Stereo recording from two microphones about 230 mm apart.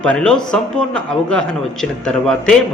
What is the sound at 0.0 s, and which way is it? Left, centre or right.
A man's voice, centre.